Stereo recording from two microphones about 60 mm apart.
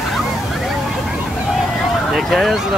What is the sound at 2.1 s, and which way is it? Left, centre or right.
Speech, centre.